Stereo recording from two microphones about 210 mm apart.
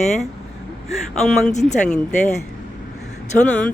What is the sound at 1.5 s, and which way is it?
Speech, 35° left (ahead or behind).